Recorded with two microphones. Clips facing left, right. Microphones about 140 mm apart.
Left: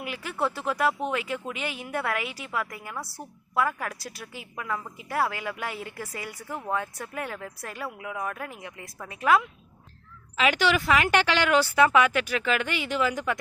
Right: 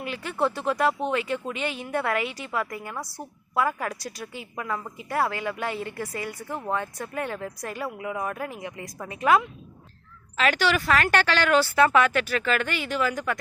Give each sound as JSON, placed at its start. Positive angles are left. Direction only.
{"t": 0.0, "sound": "a woman's voice", "side_deg": 5}
{"t": 10.3, "sound": "speech", "side_deg": 10}